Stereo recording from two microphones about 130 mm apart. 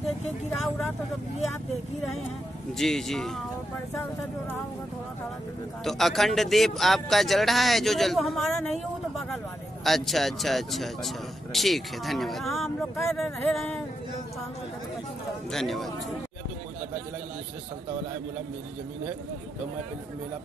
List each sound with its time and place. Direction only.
0.5 s speech: 15° left (ahead or behind)
2.8 s speech: 5° left (ahead or behind)
3.9 s speech: 20° left (ahead or behind)
5.9 s speech: centre (ahead or behind)
9.8 s speech: centre (ahead or behind)
15.5 s speech: centre (ahead or behind)